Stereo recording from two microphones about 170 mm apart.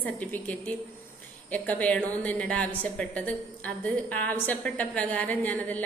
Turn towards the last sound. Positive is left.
turn(degrees=10)  # may be behind; listen again after turning